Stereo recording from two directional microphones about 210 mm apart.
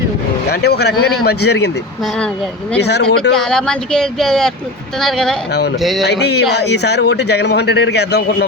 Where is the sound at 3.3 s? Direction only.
5° left (ahead or behind).